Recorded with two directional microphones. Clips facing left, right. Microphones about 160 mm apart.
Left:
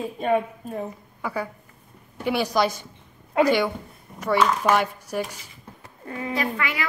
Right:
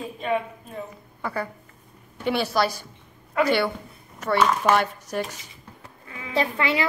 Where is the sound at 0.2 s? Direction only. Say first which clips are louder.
Left 3 dB; 45° left (ahead or behind).